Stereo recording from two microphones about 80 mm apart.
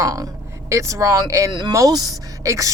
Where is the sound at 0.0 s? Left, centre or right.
Right.